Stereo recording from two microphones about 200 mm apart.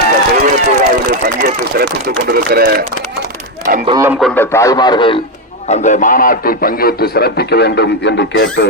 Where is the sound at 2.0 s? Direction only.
50° right (ahead or behind).